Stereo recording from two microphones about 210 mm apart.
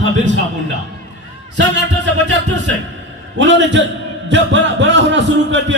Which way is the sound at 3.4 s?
60° right (ahead or behind).